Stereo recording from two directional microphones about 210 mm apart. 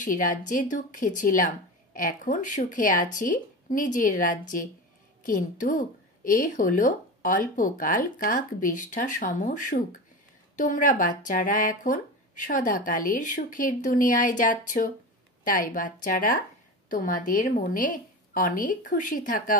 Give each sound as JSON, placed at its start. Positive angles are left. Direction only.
{"t": 0.0, "sound": "a woman's voice", "side_deg": 40}